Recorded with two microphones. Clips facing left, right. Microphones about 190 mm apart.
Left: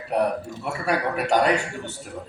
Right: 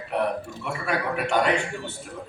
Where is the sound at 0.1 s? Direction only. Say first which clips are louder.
Left 3 dB; 40° left (ahead or behind).